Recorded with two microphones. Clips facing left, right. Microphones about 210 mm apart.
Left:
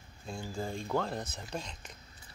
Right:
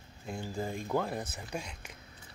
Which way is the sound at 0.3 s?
20° right (ahead or behind).